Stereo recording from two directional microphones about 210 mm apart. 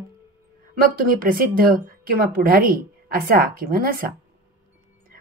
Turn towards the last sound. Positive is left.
turn(degrees=-45)  # may be behind; listen again after turning